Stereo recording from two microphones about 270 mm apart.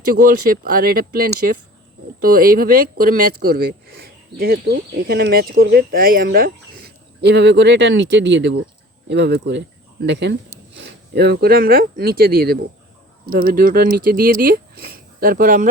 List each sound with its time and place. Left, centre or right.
0.2 s speech: right